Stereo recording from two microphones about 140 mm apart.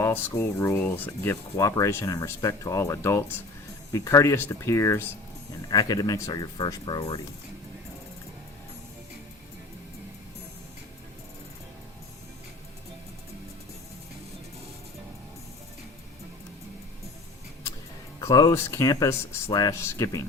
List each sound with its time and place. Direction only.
0.0 s speech: 20° left (ahead or behind)
18.2 s speech: 25° left (ahead or behind)